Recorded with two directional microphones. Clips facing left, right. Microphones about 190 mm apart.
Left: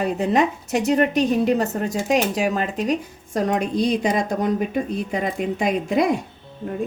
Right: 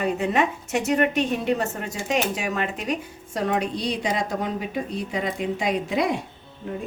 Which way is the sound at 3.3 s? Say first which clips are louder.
Left 4 dB; 45° left (ahead or behind).